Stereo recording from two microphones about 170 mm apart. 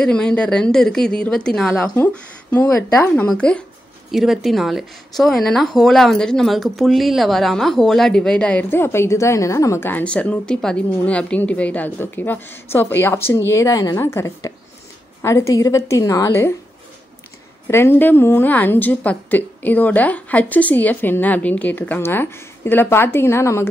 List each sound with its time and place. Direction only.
0.0 s a woman's voice: 5° left (ahead or behind)
17.6 s a woman's voice: 15° left (ahead or behind)